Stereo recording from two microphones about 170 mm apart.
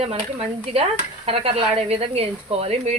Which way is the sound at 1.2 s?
35° right (ahead or behind).